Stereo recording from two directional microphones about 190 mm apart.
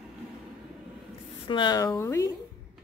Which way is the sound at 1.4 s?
25° left (ahead or behind).